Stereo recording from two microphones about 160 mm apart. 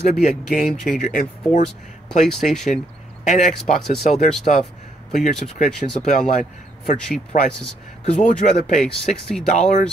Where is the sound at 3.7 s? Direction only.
Centre (ahead or behind).